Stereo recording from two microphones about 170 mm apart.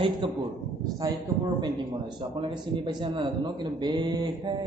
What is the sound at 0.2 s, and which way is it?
Speech, 30° right (ahead or behind).